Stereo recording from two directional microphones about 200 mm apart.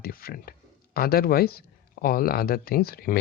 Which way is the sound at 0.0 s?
45° left (ahead or behind).